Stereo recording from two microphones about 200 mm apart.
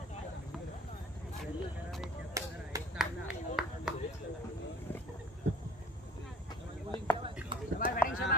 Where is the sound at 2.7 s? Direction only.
15° right (ahead or behind).